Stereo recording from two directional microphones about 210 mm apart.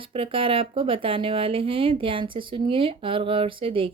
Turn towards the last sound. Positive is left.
turn(degrees=-25)  # may be behind; listen again after turning